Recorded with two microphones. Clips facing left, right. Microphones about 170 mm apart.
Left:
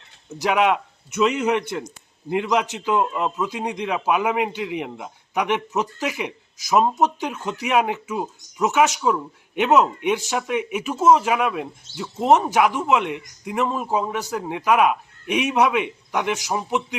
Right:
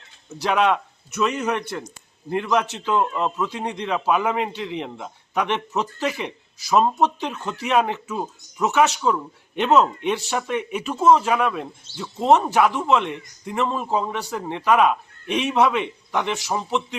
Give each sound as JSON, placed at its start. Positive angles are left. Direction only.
{"t": 0.4, "sound": "a man's voice", "side_deg": 10}